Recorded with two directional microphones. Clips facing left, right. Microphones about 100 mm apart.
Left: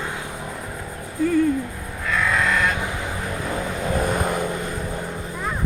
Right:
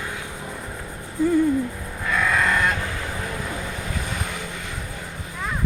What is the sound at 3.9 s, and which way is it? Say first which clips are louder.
Vehicle: left 8 dB; 45° left (ahead or behind).